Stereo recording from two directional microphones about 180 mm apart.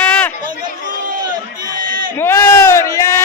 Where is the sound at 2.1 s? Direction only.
15° left (ahead or behind).